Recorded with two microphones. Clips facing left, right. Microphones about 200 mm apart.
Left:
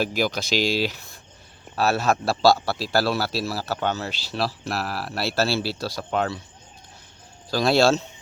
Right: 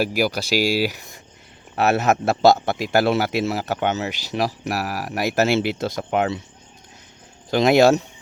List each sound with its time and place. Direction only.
0.0 s a man's voice: 10° right (ahead or behind)
7.5 s a man's voice: 20° right (ahead or behind)